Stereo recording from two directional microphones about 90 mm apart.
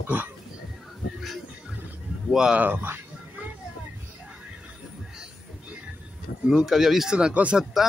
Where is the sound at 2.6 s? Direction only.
20° right (ahead or behind).